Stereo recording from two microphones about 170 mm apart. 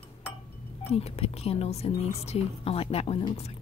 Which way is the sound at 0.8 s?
35° left (ahead or behind).